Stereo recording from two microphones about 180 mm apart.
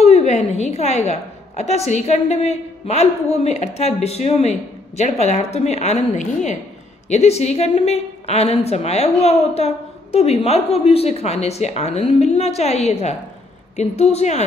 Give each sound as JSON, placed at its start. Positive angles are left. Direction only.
{"t": 0.0, "sound": "a woman's voice", "side_deg": 35}